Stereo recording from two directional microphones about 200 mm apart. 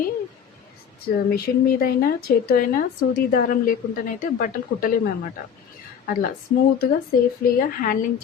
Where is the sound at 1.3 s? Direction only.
50° left (ahead or behind).